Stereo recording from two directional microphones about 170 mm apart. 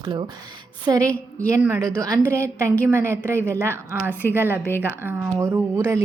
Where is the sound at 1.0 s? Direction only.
10° left (ahead or behind).